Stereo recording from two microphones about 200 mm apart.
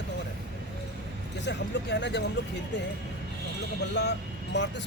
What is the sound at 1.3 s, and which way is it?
Speech, 60° left (ahead or behind).